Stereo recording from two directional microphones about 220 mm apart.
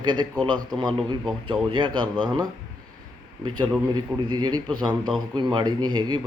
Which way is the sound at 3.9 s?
20° right (ahead or behind).